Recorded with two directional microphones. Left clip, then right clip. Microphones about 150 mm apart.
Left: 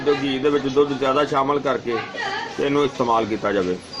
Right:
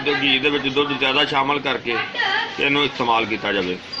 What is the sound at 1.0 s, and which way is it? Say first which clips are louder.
A man's voice: right 1 dB; 20° left (ahead or behind).